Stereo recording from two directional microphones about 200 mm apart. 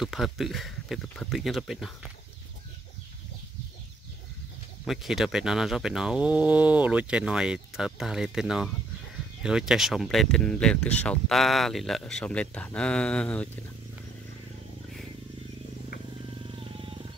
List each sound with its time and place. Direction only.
0.0 s speech: centre (ahead or behind)
4.8 s speech: centre (ahead or behind)
16.4 s a sound: 25° right (ahead or behind)